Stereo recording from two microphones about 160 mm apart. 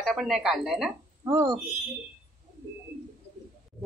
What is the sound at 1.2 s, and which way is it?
Speech, 20° right (ahead or behind).